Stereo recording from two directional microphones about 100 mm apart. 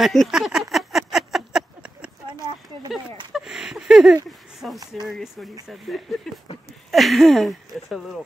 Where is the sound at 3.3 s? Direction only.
5° right (ahead or behind).